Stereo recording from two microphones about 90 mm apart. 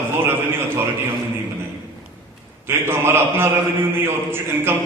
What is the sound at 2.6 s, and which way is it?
A man's voice, 25° right (ahead or behind).